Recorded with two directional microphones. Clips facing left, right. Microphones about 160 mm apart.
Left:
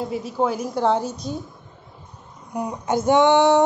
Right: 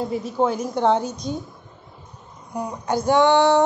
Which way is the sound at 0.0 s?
5° left (ahead or behind).